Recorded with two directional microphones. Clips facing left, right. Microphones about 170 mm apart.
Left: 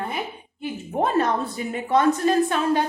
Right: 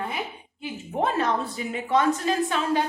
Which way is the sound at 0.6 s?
50° left (ahead or behind).